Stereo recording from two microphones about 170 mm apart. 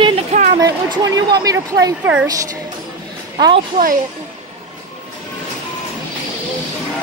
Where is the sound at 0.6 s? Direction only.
25° right (ahead or behind).